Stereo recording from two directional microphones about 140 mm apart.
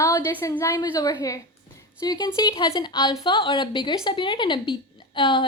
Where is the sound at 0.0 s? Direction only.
25° left (ahead or behind).